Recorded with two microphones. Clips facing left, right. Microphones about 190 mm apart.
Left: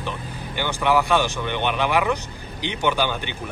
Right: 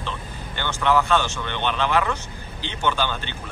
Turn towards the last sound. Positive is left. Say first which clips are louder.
# left 2 dB
turn(degrees=15)  # may be behind; listen again after turning